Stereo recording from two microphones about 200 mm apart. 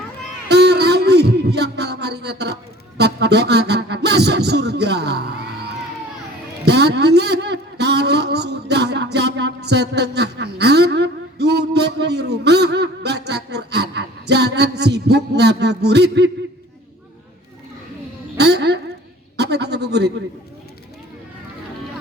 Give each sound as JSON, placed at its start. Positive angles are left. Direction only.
{"t": 0.4, "sound": "a sound", "side_deg": -55}
{"t": 3.0, "sound": "music", "side_deg": -55}
{"t": 6.7, "sound": "a man's voice", "side_deg": -55}
{"t": 18.3, "sound": "a woman's voice", "side_deg": -55}